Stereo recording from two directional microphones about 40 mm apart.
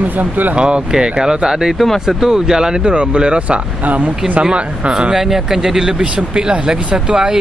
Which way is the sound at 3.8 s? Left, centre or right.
Right.